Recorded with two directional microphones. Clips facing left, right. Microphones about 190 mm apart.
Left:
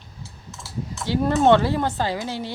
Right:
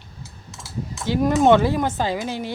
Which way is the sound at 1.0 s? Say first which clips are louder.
Right 1 dB; 15° right (ahead or behind).